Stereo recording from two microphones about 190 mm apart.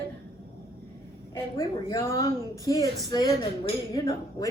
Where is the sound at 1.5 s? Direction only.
15° left (ahead or behind).